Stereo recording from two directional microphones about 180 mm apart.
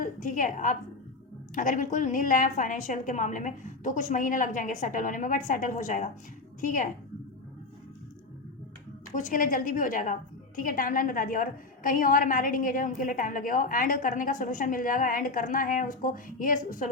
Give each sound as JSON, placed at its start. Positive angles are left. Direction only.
{"t": 0.0, "sound": "a woman's voice", "side_deg": 45}
{"t": 9.1, "sound": "a woman's voice", "side_deg": 45}